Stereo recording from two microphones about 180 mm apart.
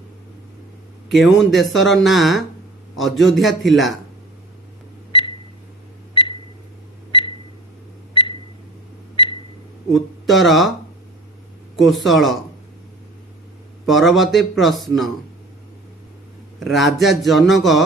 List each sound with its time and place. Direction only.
1.1 s speech: centre (ahead or behind)
7.1 s a sound: 30° left (ahead or behind)
9.9 s speech: centre (ahead or behind)
11.8 s speech: centre (ahead or behind)
13.8 s speech: centre (ahead or behind)
16.5 s speech: centre (ahead or behind)